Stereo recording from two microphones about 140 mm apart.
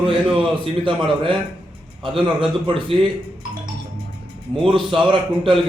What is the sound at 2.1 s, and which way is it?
Speech, 35° right (ahead or behind).